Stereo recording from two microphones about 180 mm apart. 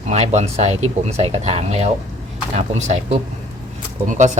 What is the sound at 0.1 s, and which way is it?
Speech, 40° right (ahead or behind).